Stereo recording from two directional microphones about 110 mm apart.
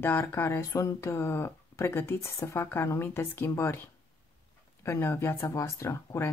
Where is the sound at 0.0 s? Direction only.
20° left (ahead or behind).